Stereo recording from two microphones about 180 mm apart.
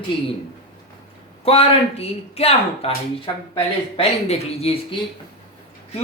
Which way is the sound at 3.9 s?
35° left (ahead or behind).